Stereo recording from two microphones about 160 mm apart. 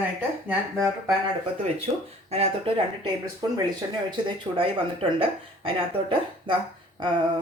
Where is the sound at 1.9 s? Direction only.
30° right (ahead or behind).